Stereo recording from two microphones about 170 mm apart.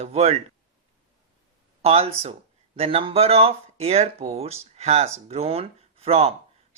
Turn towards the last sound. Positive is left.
turn(degrees=-35)  # may be behind; listen again after turning